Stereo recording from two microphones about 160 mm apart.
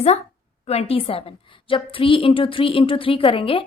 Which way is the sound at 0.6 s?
40° left (ahead or behind).